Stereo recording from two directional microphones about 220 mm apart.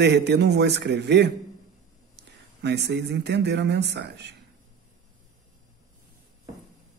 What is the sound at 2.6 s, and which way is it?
A man's voice, 50° right (ahead or behind).